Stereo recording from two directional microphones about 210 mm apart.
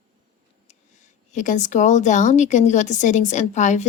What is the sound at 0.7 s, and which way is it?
A woman's voice, 35° left (ahead or behind).